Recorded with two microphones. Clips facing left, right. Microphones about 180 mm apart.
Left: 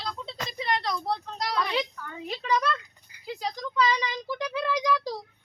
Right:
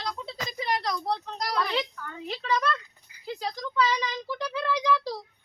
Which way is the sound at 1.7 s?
15° left (ahead or behind).